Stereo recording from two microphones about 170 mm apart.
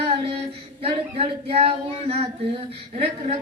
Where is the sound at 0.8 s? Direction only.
35° right (ahead or behind).